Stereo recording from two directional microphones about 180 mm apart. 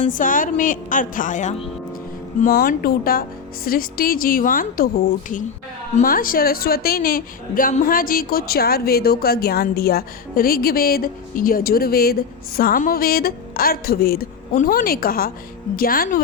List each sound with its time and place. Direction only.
0.0 s a woman's voice: 50° left (ahead or behind)
2.4 s a woman's voice: 50° left (ahead or behind)